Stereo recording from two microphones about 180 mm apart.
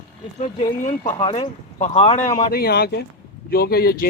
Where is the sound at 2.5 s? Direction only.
60° left (ahead or behind).